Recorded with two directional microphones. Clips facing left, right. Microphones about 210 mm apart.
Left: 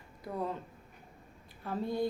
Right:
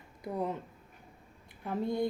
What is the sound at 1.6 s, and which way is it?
Speech, 20° right (ahead or behind).